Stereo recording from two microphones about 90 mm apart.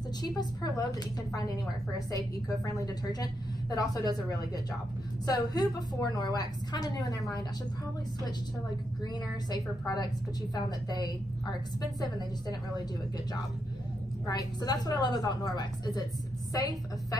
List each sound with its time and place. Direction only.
0.2 s a woman's voice: 50° left (ahead or behind)
9.0 s a woman's voice: 50° left (ahead or behind)
14.2 s a woman's voice: 45° left (ahead or behind)